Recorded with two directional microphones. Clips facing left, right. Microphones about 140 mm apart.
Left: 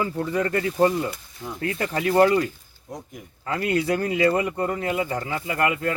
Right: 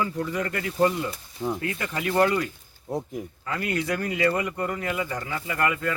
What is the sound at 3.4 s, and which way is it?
Speech, 30° left (ahead or behind).